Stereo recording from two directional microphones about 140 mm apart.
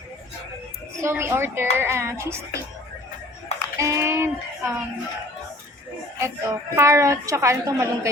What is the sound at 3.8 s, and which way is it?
Child singing, 20° right (ahead or behind).